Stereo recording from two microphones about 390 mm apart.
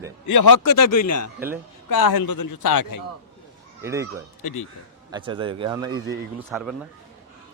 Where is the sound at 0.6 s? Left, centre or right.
Left.